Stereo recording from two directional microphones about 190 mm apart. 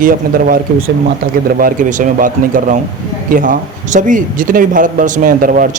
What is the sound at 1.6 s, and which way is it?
Speech, 45° right (ahead or behind).